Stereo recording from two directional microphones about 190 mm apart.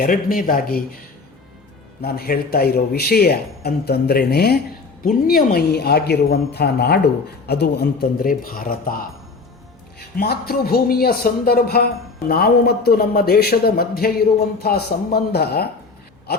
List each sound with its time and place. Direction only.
0.0 s speech: 50° left (ahead or behind)
2.0 s a man's voice: 55° left (ahead or behind)
10.2 s a man's voice: 55° left (ahead or behind)